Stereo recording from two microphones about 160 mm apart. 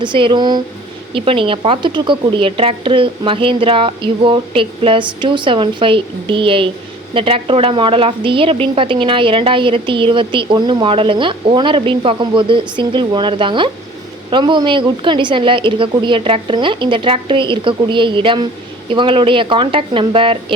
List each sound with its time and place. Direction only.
0.0 s a woman's voice: 30° right (ahead or behind)